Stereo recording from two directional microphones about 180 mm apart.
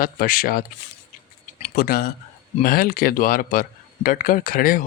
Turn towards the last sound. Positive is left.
turn(degrees=50)  # may be behind; listen again after turning